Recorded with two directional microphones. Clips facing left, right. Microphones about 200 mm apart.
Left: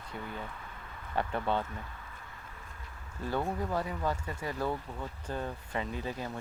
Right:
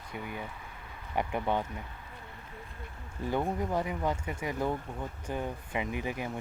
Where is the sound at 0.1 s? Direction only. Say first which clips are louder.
Right 2 dB; 15° right (ahead or behind).